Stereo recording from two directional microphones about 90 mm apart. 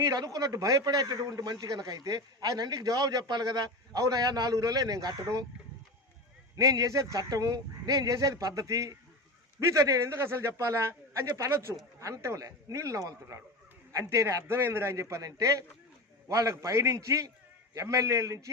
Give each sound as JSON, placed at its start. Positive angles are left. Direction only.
{"t": 0.0, "sound": "a man's voice", "side_deg": -40}
{"t": 6.6, "sound": "speech", "side_deg": -40}